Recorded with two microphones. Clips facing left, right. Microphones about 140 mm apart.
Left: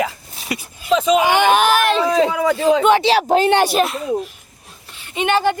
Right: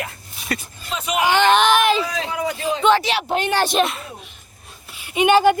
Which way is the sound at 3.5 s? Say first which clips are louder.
Left 3 dB; 10° left (ahead or behind).